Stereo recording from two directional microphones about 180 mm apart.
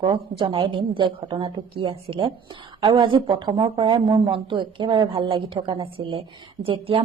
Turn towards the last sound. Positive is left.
turn(degrees=-30)  # may be behind; listen again after turning